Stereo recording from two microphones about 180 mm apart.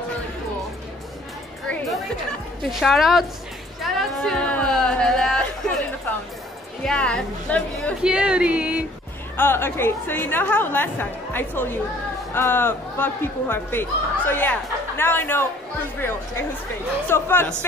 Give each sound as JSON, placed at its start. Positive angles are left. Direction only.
{"t": 2.6, "sound": "speech", "side_deg": 0}
{"t": 3.8, "sound": "a sound", "side_deg": 5}
{"t": 6.8, "sound": "speech", "side_deg": 5}
{"t": 8.0, "sound": "speech", "side_deg": -5}
{"t": 9.4, "sound": "speech", "side_deg": 10}